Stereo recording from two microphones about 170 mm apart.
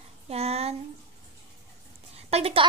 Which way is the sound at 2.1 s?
35° right (ahead or behind).